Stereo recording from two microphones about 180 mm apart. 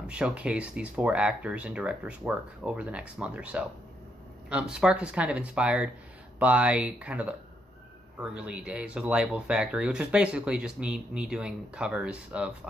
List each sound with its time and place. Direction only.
0.0 s speech: 5° right (ahead or behind)